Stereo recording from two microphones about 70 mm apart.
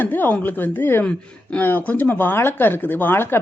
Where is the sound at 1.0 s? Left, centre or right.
Centre.